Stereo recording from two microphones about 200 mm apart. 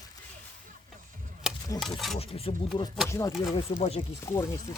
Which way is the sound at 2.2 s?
30° left (ahead or behind).